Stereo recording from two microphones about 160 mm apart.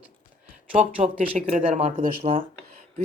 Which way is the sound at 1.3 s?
55° right (ahead or behind).